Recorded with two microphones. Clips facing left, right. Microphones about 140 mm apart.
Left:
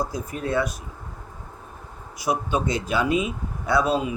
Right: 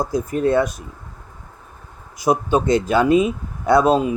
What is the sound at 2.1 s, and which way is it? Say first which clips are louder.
A man's voice: right 7 dB; 45° right (ahead or behind).